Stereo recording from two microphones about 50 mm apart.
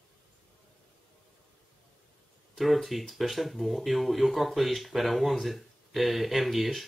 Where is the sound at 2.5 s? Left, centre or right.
Centre.